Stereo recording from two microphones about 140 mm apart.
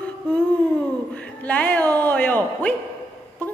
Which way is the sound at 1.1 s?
10° left (ahead or behind).